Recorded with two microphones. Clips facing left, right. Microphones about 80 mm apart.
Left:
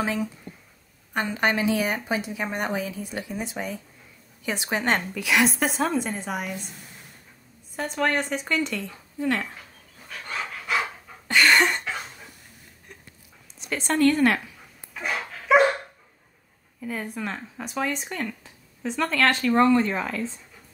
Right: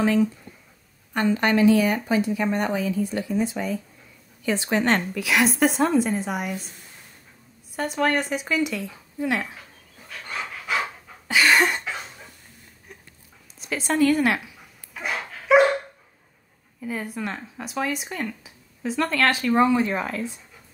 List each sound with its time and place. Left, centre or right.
0.0 s a woman's voice: centre
5.2 s speech: centre
7.7 s speech: centre
10.0 s dog: centre
11.2 s a sound: centre
13.6 s speech: centre
15.0 s dog: centre
16.8 s speech: centre